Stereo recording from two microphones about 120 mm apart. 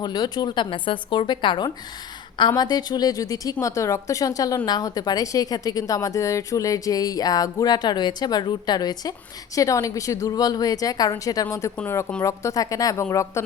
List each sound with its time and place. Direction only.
0.0 s a woman's voice: 35° left (ahead or behind)